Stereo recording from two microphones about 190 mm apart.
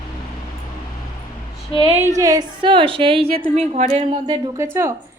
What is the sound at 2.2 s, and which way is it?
A woman's voice, 20° right (ahead or behind).